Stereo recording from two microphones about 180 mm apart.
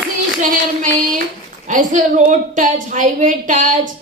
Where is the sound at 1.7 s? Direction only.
45° right (ahead or behind).